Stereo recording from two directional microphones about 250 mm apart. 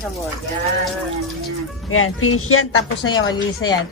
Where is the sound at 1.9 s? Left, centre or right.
Left.